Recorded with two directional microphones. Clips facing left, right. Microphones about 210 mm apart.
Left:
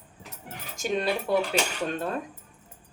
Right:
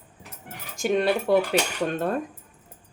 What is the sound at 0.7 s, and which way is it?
Speech, 55° right (ahead or behind).